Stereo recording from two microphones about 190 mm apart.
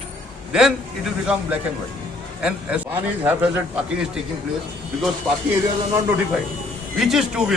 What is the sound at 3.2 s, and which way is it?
Speech, 10° right (ahead or behind).